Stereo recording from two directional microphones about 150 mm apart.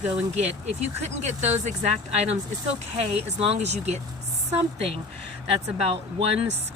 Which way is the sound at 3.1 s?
45° right (ahead or behind).